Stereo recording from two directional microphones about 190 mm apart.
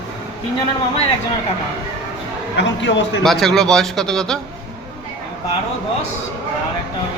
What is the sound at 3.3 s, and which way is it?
A man's voice, centre (ahead or behind).